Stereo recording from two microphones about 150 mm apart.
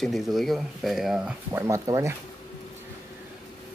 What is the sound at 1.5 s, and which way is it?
Speech, 20° right (ahead or behind).